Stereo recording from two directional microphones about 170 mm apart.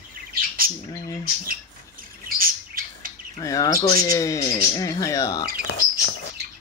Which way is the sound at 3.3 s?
20° left (ahead or behind).